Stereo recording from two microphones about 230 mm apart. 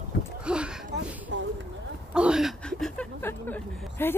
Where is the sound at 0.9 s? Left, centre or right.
Right.